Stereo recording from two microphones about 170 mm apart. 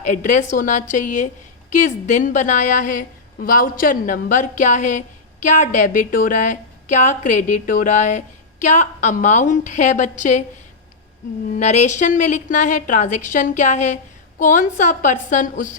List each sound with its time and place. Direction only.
0.0 s a woman's voice: 45° left (ahead or behind)
11.5 s a woman's voice: 45° left (ahead or behind)